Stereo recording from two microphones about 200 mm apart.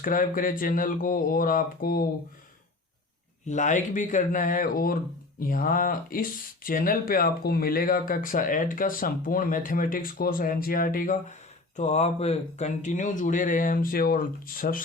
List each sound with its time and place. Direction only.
0.0 s speech: 45° left (ahead or behind)
3.4 s speech: 35° left (ahead or behind)